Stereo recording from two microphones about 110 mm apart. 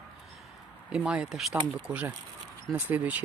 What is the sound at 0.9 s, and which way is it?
Speech, 10° right (ahead or behind).